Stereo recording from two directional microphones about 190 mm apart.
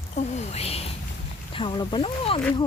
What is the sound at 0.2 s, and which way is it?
Speech, 35° left (ahead or behind).